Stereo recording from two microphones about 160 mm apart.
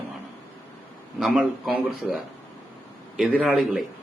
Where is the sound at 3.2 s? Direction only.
5° right (ahead or behind).